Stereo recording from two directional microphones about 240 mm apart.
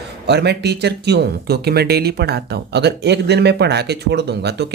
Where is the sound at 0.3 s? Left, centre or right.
Right.